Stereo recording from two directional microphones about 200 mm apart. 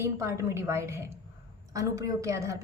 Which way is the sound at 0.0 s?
15° right (ahead or behind).